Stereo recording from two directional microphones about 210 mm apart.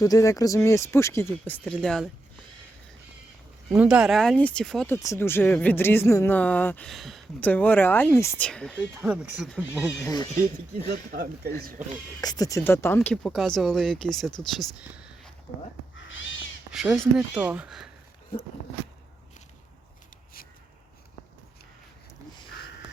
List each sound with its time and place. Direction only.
0.0 s speech: 15° left (ahead or behind)
3.7 s speech: 5° right (ahead or behind)
10.0 s speech: 20° left (ahead or behind)
11.1 s speech: 40° right (ahead or behind)
12.2 s speech: 15° left (ahead or behind); by 15.3 s 5° right (ahead or behind)
16.0 s crow: 65° left (ahead or behind)
17.2 s speech: 5° right (ahead or behind)